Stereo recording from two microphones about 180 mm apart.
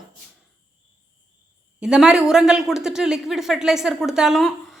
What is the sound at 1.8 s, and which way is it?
A woman's voice, 5° right (ahead or behind).